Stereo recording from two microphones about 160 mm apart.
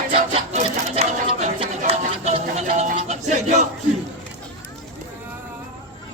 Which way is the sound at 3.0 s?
45° right (ahead or behind).